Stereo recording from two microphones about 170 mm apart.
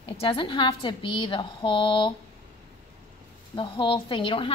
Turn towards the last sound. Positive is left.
turn(degrees=30)  # may be behind; listen again after turning